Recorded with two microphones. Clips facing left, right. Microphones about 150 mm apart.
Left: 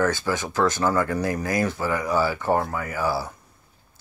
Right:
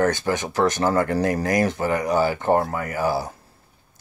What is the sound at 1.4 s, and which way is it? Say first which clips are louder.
Speech: right 3 dB; 15° right (ahead or behind).